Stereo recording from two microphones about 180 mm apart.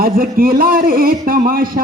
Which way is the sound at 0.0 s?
55° right (ahead or behind).